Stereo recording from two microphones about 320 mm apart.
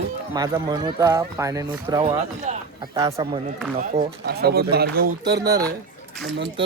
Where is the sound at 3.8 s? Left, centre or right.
Right.